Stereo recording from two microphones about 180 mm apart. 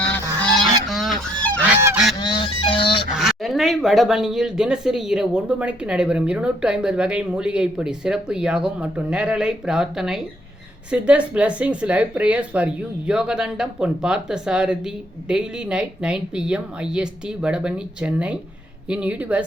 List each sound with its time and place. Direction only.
0.6 s goose: centre (ahead or behind)
1.7 s goose: 10° right (ahead or behind)
2.1 s goose: 25° left (ahead or behind)
3.1 s a woman's voice: centre (ahead or behind)